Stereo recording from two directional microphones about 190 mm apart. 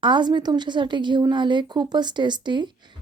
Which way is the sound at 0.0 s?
25° right (ahead or behind).